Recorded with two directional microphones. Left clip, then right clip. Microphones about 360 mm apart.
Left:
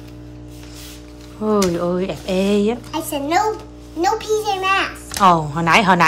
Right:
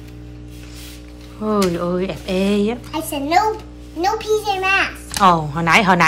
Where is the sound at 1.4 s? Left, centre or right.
Centre.